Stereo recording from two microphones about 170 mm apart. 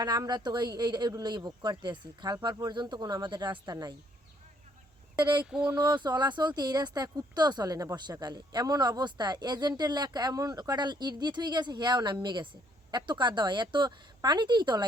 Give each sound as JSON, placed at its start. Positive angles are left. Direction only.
{"t": 0.0, "sound": "speech", "side_deg": -25}
{"t": 5.1, "sound": "speech", "side_deg": -25}
{"t": 5.5, "sound": "a sound", "side_deg": -5}
{"t": 5.7, "sound": "speech", "side_deg": -25}